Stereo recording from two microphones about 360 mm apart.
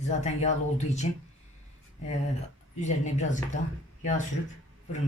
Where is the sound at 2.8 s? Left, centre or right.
Centre.